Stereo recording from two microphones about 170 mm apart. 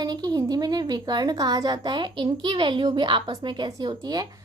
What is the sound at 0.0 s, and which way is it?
Speech, 25° right (ahead or behind).